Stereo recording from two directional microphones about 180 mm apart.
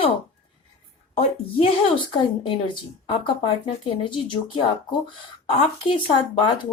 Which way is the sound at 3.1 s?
30° left (ahead or behind).